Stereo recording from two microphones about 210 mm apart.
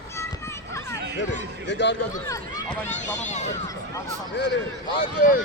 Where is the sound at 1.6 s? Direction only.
60° left (ahead or behind).